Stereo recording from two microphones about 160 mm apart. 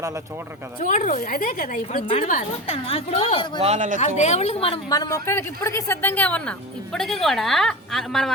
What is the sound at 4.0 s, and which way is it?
Speech, 45° left (ahead or behind).